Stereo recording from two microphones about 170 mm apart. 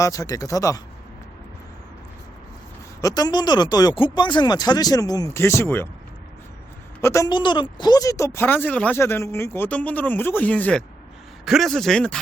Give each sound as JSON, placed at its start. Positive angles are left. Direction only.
{"t": 0.0, "sound": "speech", "side_deg": 20}
{"t": 3.0, "sound": "speech", "side_deg": 20}
{"t": 7.0, "sound": "a woman's voice", "side_deg": 15}